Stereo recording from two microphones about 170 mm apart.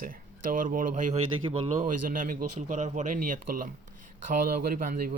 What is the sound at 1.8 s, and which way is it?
Speech, 50° right (ahead or behind).